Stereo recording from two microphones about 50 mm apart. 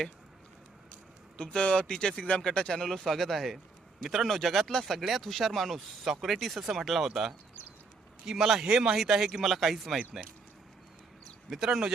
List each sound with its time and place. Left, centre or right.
1.4 s speech: centre
4.0 s speech: centre
4.3 s speech: centre
11.4 s speech: centre